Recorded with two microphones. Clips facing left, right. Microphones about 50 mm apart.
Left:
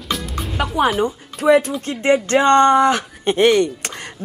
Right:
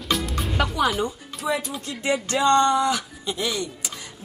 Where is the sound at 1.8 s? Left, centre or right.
Left.